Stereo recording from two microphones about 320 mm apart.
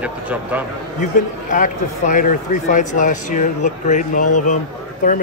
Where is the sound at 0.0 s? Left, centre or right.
Centre.